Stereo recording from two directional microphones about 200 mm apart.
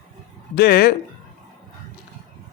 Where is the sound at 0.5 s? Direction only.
50° left (ahead or behind).